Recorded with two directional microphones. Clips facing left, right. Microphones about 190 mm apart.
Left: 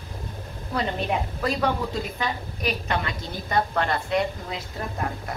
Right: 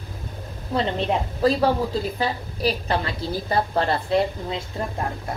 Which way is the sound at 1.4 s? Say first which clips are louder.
Right 7 dB; 30° right (ahead or behind).